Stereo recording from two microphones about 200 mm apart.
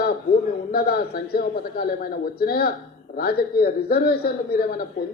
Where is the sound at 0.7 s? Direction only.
50° left (ahead or behind).